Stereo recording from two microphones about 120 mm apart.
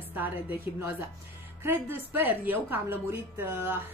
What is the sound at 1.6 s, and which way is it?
A woman's voice, 20° right (ahead or behind).